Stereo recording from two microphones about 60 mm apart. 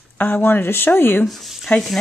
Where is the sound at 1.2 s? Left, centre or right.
Centre.